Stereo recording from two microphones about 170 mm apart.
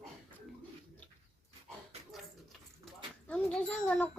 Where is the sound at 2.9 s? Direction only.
5° left (ahead or behind).